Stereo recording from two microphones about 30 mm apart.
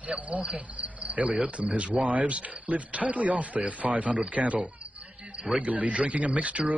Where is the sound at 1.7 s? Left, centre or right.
Right.